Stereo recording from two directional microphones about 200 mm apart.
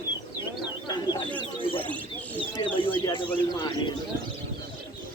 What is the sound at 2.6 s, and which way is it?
Bird, 25° left (ahead or behind).